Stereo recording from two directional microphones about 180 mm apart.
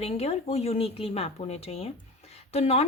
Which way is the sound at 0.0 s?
35° left (ahead or behind).